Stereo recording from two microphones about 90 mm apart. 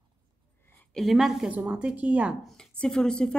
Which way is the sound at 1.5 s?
15° right (ahead or behind).